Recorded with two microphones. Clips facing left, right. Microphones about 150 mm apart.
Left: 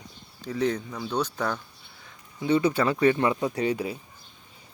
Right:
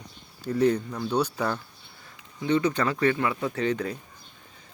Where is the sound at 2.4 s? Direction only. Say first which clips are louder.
Left 1 dB; 10° left (ahead or behind).